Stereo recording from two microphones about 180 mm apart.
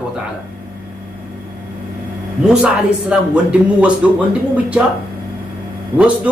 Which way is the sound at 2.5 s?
5° right (ahead or behind).